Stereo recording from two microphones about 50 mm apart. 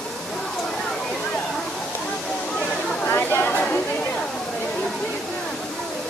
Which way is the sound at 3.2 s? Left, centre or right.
Left.